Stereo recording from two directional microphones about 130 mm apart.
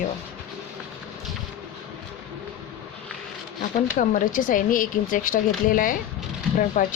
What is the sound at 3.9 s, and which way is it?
Speech, 90° left.